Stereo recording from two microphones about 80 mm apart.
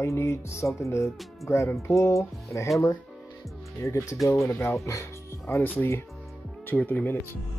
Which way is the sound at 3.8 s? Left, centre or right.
Left.